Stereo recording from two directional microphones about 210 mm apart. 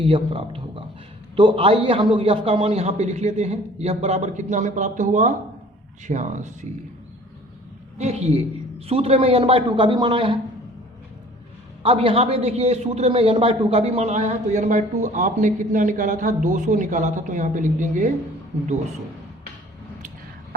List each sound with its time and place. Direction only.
0.0 s a man's voice: 25° right (ahead or behind)
7.9 s a man's voice: 30° right (ahead or behind)
11.8 s a man's voice: 25° right (ahead or behind)